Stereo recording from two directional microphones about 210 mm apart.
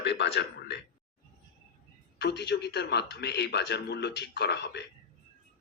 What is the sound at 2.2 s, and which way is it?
A man's voice, 55° left (ahead or behind).